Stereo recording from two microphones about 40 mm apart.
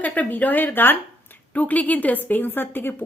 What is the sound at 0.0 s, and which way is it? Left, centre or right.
A woman's voice, left.